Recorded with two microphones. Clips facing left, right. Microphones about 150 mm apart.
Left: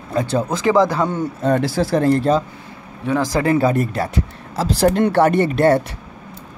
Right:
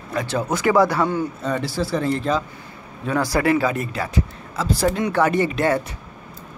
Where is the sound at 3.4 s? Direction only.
25° left (ahead or behind).